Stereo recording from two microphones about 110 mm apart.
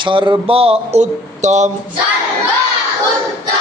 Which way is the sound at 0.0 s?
50° right (ahead or behind).